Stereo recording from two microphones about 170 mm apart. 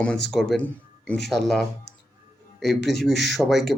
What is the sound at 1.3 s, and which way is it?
Speech, centre (ahead or behind).